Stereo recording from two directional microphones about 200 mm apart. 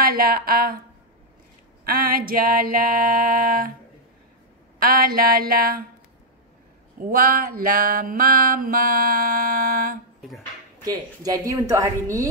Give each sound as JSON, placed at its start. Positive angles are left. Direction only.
{"t": 0.0, "sound": "mantra", "side_deg": -45}
{"t": 1.9, "sound": "mantra", "side_deg": -45}
{"t": 4.7, "sound": "mantra", "side_deg": -45}
{"t": 7.0, "sound": "mantra", "side_deg": -45}
{"t": 10.8, "sound": "speech", "side_deg": -20}